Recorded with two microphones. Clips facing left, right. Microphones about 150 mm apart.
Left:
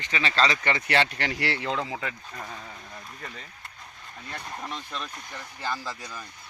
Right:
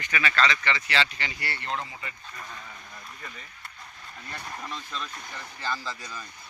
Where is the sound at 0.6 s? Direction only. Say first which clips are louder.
Left 3 dB; 55° left (ahead or behind); by 2.1 s 90° left.